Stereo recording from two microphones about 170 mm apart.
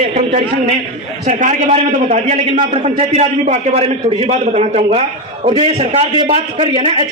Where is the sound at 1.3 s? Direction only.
45° right (ahead or behind).